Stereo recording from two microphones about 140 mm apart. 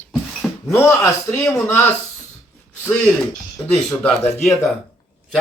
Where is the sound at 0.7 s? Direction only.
20° left (ahead or behind).